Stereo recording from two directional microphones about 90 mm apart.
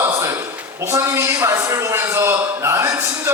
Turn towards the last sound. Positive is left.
turn(degrees=-35)  # may be behind; listen again after turning